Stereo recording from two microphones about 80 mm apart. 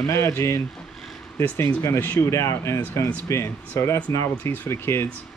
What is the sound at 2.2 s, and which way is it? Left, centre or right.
Speech, left.